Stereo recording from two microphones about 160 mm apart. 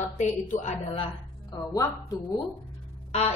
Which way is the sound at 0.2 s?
50° left (ahead or behind).